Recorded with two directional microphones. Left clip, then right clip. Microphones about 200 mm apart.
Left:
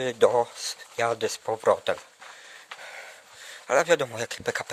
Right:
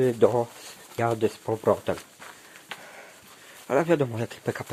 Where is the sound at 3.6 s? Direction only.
35° left (ahead or behind).